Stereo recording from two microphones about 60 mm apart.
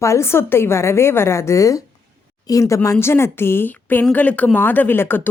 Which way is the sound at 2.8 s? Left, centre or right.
Left.